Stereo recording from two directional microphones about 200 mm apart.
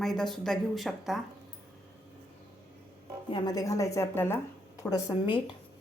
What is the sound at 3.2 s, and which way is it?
A woman's voice, 20° left (ahead or behind).